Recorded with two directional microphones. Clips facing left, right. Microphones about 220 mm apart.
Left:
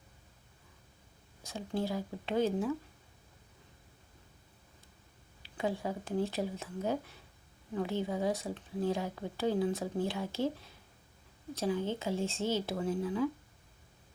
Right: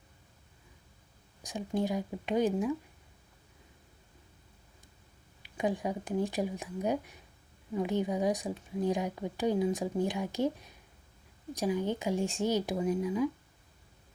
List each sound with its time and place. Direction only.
1.4 s a woman's voice: 15° right (ahead or behind)
5.4 s a woman's voice: 15° right (ahead or behind)